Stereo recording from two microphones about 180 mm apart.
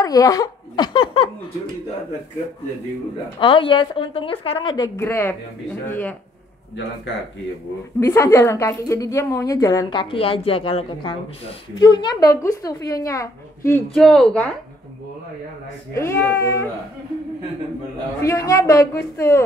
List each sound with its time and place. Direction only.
0.0 s a woman's voice: 20° left (ahead or behind)
3.3 s a woman's voice: 30° left (ahead or behind)
4.9 s a woman's voice: 15° left (ahead or behind)
8.0 s a woman's voice: 15° left (ahead or behind)
13.9 s speech: centre (ahead or behind)
15.9 s a woman's voice: 15° left (ahead or behind)
18.2 s a woman's voice: 15° left (ahead or behind)